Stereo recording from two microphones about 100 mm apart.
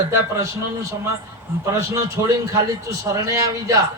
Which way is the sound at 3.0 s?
30° right (ahead or behind).